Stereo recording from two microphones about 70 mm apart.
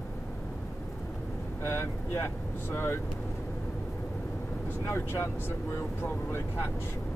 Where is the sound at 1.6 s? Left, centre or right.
Left.